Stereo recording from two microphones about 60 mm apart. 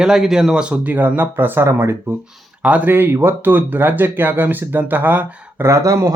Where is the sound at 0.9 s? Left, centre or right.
Right.